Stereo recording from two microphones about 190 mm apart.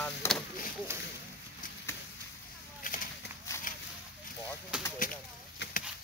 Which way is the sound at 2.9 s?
45° left (ahead or behind).